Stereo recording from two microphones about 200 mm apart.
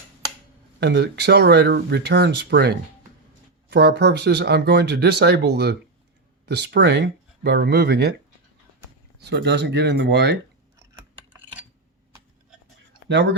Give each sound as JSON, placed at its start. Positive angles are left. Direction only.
{"t": 0.8, "sound": "speech", "side_deg": -55}
{"t": 9.1, "sound": "speech", "side_deg": -55}
{"t": 13.1, "sound": "speech", "side_deg": -60}